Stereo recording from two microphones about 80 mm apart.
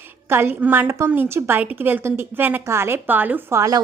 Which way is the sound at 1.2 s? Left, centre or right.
Right.